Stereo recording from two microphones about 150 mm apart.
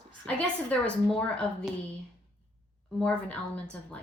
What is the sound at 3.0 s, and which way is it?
Speech, 5° left (ahead or behind).